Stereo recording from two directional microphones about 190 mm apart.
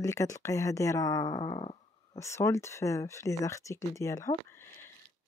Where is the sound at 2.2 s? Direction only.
15° left (ahead or behind).